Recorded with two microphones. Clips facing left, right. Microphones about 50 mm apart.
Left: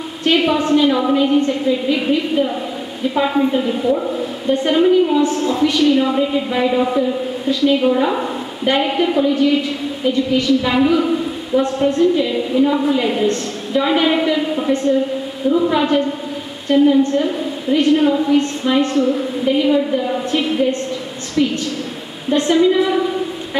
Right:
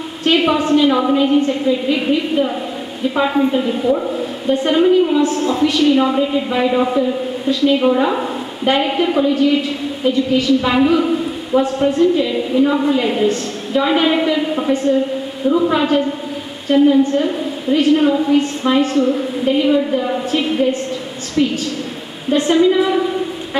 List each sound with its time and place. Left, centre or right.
0.2 s a woman's voice: centre
21.4 s a woman's voice: centre
22.3 s a woman's voice: centre